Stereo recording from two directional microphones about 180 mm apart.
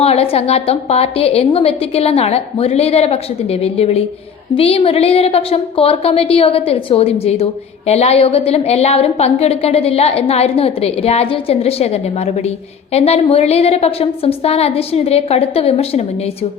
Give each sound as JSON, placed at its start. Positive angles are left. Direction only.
{"t": 0.0, "sound": "a woman's voice", "side_deg": 35}